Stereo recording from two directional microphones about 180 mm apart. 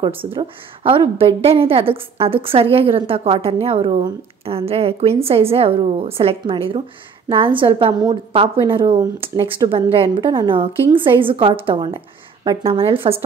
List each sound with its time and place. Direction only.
0.2 s a woman's voice: 30° right (ahead or behind)